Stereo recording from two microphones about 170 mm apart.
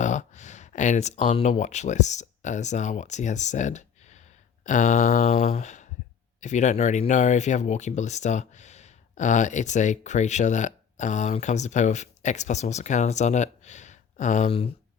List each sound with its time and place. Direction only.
0.0 s speech: 45° left (ahead or behind)
5.5 s speech: 45° left (ahead or behind)